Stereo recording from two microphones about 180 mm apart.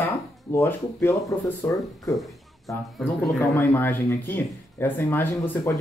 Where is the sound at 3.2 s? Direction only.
15° left (ahead or behind).